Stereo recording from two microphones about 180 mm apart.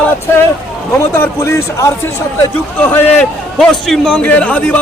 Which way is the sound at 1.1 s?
15° left (ahead or behind).